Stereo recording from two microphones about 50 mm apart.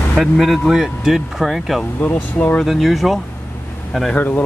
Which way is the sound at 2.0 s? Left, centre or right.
Left.